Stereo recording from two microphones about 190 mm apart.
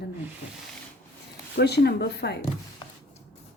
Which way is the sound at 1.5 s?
60° left (ahead or behind).